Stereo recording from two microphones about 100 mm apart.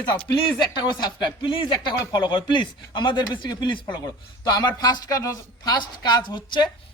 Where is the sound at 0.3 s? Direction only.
50° left (ahead or behind).